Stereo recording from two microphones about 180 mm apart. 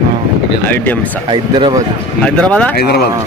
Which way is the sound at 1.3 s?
25° right (ahead or behind).